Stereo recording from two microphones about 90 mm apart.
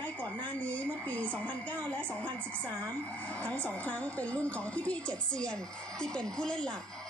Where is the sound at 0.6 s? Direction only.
15° left (ahead or behind).